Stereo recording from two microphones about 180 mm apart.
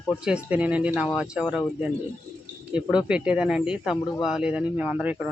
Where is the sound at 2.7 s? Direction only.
5° right (ahead or behind).